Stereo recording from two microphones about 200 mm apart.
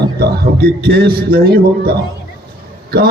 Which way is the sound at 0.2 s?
50° right (ahead or behind).